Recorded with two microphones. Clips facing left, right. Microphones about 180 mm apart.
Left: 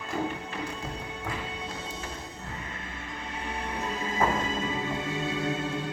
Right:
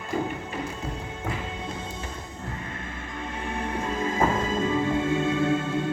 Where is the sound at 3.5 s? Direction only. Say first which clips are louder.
Right 4 dB; 50° right (ahead or behind).